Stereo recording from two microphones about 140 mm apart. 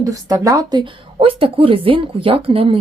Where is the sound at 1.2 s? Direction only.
40° right (ahead or behind).